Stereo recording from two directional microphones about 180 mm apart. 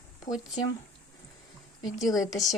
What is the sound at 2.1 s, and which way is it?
Speech, 20° left (ahead or behind).